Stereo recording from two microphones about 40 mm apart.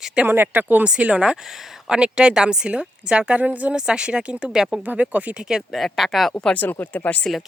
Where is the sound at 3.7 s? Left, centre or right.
Right.